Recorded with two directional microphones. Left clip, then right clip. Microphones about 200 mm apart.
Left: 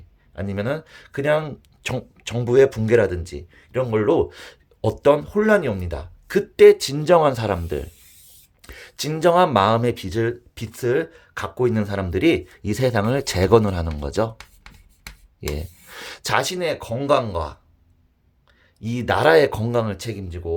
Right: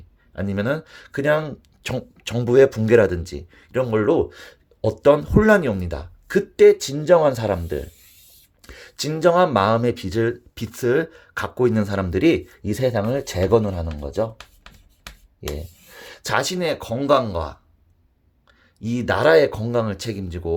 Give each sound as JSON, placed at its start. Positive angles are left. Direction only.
{"t": 0.3, "sound": "speech", "side_deg": -10}
{"t": 5.2, "sound": "speech", "side_deg": -15}
{"t": 15.4, "sound": "speech", "side_deg": 10}
{"t": 18.8, "sound": "speech", "side_deg": -5}
{"t": 19.8, "sound": "speech", "side_deg": -10}